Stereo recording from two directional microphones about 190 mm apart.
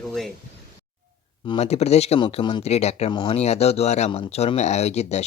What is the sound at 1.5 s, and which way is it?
Speech, 35° left (ahead or behind).